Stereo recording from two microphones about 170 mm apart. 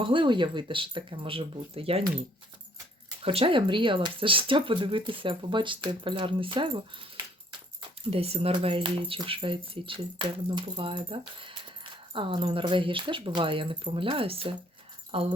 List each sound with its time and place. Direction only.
0.0 s speech: 30° right (ahead or behind)
3.2 s speech: 30° right (ahead or behind)